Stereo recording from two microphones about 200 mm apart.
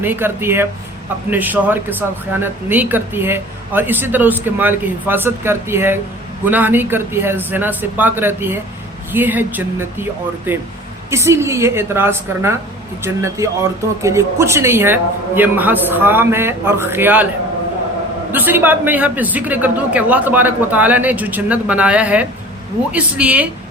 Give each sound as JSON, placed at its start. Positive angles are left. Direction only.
{"t": 0.0, "sound": "a man's voice", "side_deg": -10}
{"t": 18.3, "sound": "a man's voice", "side_deg": -10}